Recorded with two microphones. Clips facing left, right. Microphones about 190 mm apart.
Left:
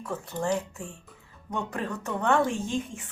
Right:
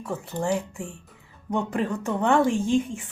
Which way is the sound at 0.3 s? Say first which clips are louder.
Right 2 dB; 10° right (ahead or behind).